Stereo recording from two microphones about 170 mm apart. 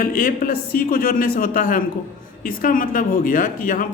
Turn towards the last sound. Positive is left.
turn(degrees=55)  # may be behind; listen again after turning